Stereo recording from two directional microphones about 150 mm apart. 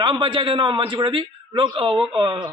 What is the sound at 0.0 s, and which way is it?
A man's voice, 35° right (ahead or behind).